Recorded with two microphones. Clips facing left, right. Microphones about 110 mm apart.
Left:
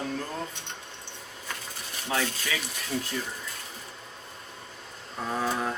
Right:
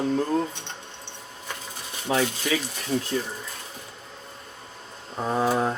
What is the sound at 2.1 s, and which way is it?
Speech, 25° right (ahead or behind).